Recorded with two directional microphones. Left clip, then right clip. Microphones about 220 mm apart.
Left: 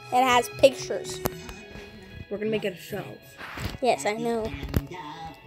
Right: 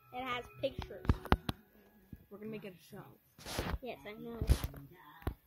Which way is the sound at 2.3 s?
10° right (ahead or behind).